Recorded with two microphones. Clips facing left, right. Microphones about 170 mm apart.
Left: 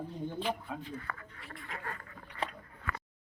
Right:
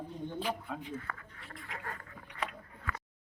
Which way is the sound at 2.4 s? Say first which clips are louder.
Left 1 dB; 30° left (ahead or behind).